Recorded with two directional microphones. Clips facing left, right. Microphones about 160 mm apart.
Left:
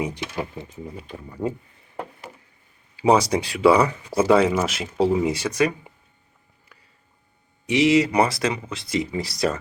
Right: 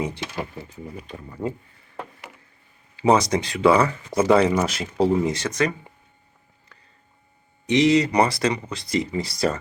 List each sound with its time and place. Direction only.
0.3 s speech: 20° left (ahead or behind)
2.9 s speech: 10° left (ahead or behind)
6.7 s a sound: 10° left (ahead or behind)
7.7 s speech: 5° left (ahead or behind)